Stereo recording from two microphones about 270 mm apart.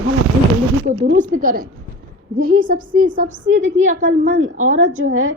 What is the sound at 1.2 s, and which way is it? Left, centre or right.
A woman's voice, right.